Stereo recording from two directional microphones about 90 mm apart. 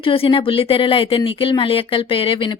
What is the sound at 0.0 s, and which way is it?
Speech, 75° left (ahead or behind).